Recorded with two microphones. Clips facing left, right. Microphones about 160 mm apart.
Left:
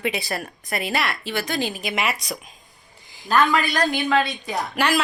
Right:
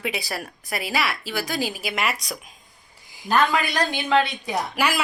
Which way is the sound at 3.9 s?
20° right (ahead or behind).